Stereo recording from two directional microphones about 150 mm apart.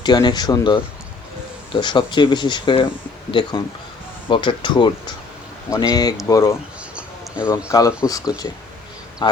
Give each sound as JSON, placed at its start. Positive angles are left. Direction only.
{"t": 0.0, "sound": "speech", "side_deg": 30}
{"t": 6.9, "sound": "a sound", "side_deg": -5}
{"t": 7.5, "sound": "speech", "side_deg": 20}